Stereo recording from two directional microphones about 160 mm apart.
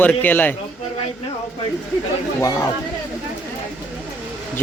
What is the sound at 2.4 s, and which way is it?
Speech, 20° left (ahead or behind).